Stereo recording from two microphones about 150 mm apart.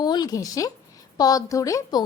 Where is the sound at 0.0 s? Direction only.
30° left (ahead or behind).